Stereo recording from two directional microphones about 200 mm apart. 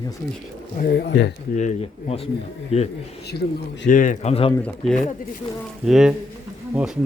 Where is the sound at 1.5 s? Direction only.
35° left (ahead or behind).